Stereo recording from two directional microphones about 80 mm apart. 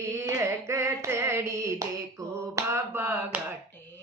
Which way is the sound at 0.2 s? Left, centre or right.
Right.